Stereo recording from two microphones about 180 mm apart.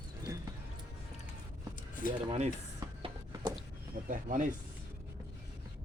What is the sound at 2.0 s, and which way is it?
Speech, 50° left (ahead or behind).